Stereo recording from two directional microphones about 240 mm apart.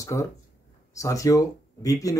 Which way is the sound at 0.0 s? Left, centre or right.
Centre.